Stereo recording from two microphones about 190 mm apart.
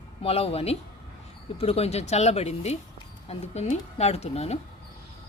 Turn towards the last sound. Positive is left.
turn(degrees=35)  # may be behind; listen again after turning